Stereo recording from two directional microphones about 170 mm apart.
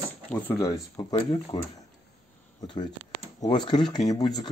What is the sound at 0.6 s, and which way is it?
Speech, 20° left (ahead or behind).